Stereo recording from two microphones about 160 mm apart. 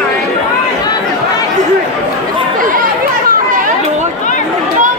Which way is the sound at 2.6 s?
60° right (ahead or behind).